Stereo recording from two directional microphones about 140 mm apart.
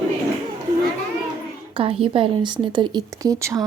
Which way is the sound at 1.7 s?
40° right (ahead or behind).